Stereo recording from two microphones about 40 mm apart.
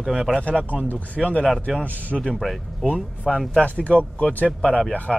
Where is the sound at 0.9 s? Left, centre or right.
Left.